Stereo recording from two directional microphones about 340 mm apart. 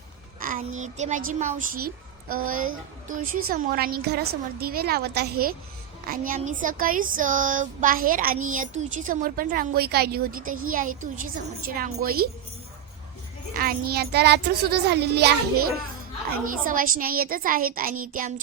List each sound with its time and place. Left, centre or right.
0.3 s a woman's voice: right
13.6 s a woman's voice: right